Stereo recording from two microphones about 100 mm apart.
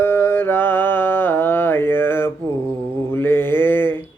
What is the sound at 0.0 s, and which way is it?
Mantra, 25° left (ahead or behind).